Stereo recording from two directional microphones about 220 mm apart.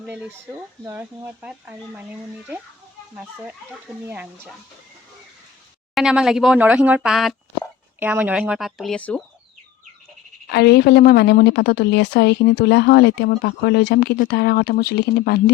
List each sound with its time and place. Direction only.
0.0 s speech: 5° right (ahead or behind)
4.0 s speech: 5° right (ahead or behind)
5.9 s speech: 5° right (ahead or behind)
10.5 s a woman's voice: 50° left (ahead or behind)